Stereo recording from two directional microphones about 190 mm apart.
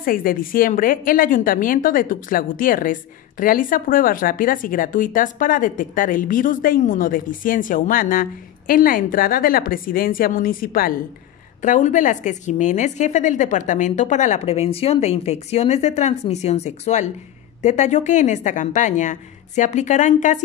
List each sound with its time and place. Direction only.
0.0 s a woman's voice: 50° left (ahead or behind)